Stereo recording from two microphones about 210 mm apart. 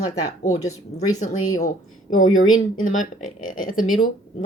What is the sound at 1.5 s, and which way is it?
Speech, 35° left (ahead or behind).